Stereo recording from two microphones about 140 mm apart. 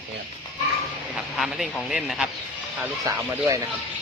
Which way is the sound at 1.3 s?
Centre (ahead or behind).